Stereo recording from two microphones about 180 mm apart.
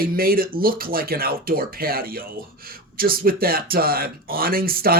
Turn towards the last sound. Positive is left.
turn(degrees=-55)  # may be behind; listen again after turning